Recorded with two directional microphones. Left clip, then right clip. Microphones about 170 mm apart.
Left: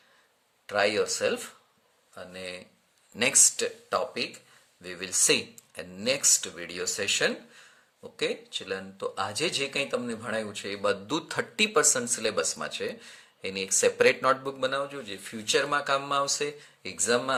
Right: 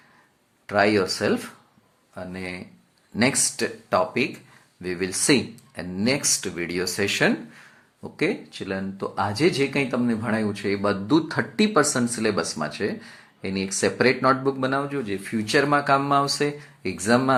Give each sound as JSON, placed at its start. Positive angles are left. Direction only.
{"t": 0.7, "sound": "speech", "side_deg": 25}
{"t": 13.0, "sound": "a sound", "side_deg": 35}
{"t": 13.7, "sound": "speech", "side_deg": 35}